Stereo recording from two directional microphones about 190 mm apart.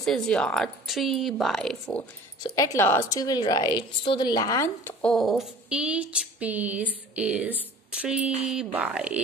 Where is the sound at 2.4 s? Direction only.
20° left (ahead or behind).